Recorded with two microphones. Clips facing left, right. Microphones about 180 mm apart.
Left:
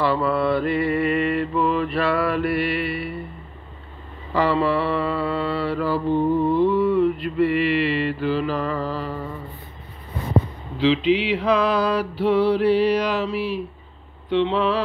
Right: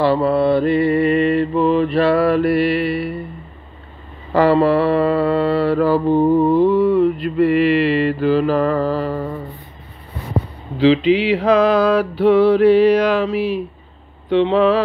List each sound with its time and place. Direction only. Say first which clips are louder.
0.0 s mantra: right 6 dB; 30° right (ahead or behind)
4.3 s mantra: right 7 dB; 45° right (ahead or behind)
11.2 s mantra: right 6 dB; 45° right (ahead or behind)
14.3 s speech: right 6 dB; 45° right (ahead or behind)